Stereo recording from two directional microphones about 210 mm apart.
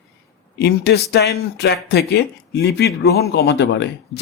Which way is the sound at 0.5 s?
50° left (ahead or behind).